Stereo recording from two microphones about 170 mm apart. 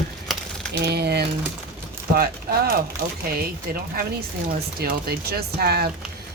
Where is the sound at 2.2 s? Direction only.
60° right (ahead or behind).